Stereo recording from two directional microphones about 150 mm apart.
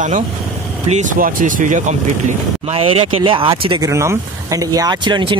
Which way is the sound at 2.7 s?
40° right (ahead or behind).